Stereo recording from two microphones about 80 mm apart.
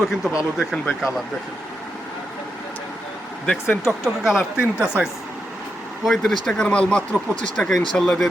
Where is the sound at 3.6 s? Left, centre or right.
Left.